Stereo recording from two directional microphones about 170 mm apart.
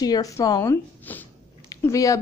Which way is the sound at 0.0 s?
20° left (ahead or behind).